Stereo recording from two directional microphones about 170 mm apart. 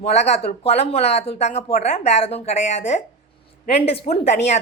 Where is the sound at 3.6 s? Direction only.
40° left (ahead or behind).